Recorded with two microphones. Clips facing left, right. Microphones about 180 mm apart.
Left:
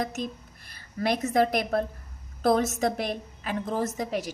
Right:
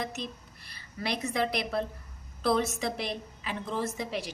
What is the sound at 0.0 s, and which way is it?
A woman's voice, 45° left (ahead or behind).